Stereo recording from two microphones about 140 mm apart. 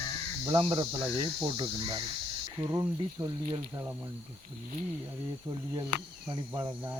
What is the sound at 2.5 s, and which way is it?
Speech, 20° right (ahead or behind).